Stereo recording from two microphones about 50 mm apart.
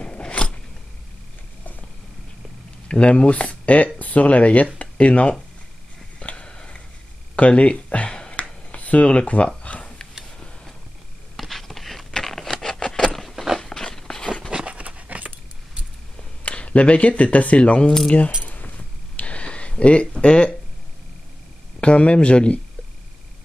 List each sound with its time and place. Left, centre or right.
0.0 s scissors: left
2.9 s speech: left
6.1 s a sound: left
7.3 s speech: left
8.4 s a sound: left
11.3 s a sound: centre
14.5 s dog: centre
14.8 s keys jangling: right
16.4 s speech: left
18.4 s keys jangling: left
19.1 s a sound: left
21.7 s speech: left